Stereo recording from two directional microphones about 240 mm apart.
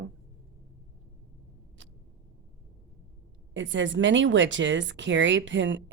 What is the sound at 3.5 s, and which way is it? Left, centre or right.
Speech, right.